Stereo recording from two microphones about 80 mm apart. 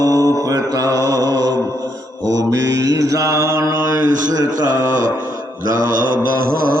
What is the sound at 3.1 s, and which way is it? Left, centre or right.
Mantra, right.